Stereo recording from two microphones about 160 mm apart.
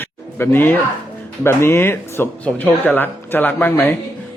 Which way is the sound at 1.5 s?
15° left (ahead or behind).